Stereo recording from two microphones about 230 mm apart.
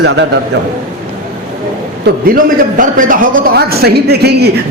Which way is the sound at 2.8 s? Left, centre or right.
Right.